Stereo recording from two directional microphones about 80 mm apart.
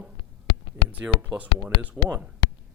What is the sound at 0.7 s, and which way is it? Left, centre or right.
Speech, centre.